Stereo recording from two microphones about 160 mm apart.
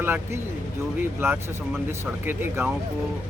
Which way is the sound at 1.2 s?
15° right (ahead or behind).